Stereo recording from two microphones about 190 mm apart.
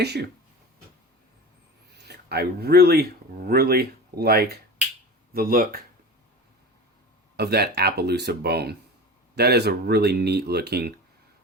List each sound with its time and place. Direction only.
2.0 s speech: 60° right (ahead or behind)
7.3 s speech: 55° right (ahead or behind)